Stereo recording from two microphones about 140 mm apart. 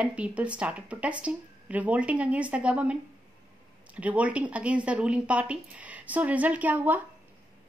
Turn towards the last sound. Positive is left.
turn(degrees=-10)  # may be behind; listen again after turning